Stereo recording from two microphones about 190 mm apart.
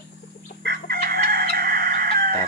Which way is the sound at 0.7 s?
55° right (ahead or behind).